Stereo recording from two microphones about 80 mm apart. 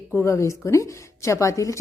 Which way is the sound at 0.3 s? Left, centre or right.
Left.